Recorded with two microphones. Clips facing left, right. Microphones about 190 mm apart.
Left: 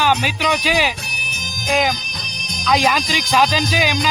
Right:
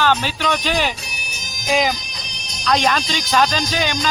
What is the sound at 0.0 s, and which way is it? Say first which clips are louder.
Speech: even; 10° left (ahead or behind).